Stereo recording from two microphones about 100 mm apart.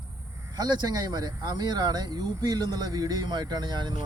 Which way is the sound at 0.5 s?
45° right (ahead or behind).